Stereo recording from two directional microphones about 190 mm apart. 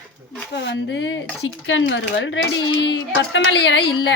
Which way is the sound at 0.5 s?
65° left (ahead or behind).